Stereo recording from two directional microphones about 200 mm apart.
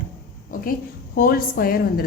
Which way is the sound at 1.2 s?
45° left (ahead or behind).